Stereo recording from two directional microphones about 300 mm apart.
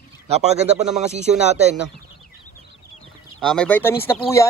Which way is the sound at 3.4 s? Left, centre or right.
Centre.